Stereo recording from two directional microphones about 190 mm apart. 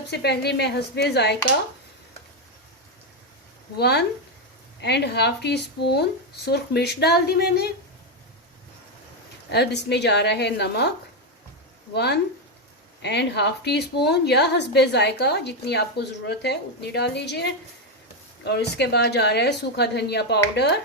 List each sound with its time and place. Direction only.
0.1 s a woman's voice: 60° left (ahead or behind)
3.8 s a woman's voice: 60° left (ahead or behind)
9.5 s a woman's voice: 60° left (ahead or behind)
11.9 s a woman's voice: 60° left (ahead or behind)